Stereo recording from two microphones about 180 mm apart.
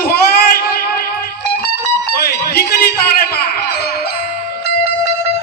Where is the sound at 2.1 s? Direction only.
60° left (ahead or behind).